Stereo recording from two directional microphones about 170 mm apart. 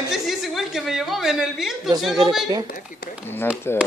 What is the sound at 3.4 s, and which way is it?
Speech, 15° left (ahead or behind).